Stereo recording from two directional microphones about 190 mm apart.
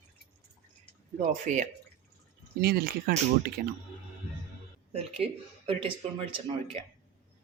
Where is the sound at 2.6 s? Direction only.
50° right (ahead or behind).